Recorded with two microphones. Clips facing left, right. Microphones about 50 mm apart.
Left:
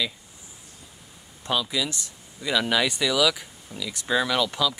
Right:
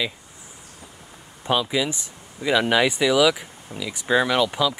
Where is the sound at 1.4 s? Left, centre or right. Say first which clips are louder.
Right 4 dB; right.